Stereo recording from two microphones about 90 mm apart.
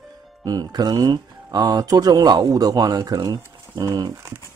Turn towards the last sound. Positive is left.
turn(degrees=-50)  # may be behind; listen again after turning